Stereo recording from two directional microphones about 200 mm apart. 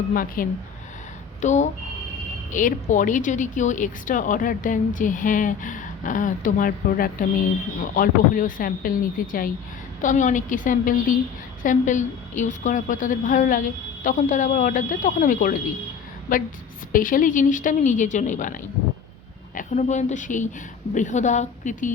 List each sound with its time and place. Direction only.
0.1 s speech: 45° left (ahead or behind)